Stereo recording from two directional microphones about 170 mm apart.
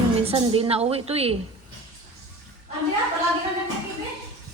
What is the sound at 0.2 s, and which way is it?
A woman's voice, 35° right (ahead or behind).